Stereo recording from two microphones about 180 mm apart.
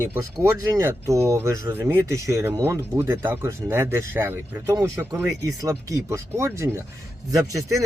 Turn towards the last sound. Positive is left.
turn(degrees=-20)  # may be behind; listen again after turning